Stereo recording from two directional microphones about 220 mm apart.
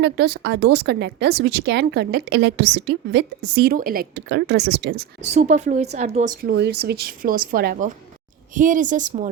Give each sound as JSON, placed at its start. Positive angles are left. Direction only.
{"t": 0.0, "sound": "speech", "side_deg": -50}
{"t": 5.2, "sound": "a woman's voice", "side_deg": -30}
{"t": 6.5, "sound": "a woman's voice", "side_deg": -50}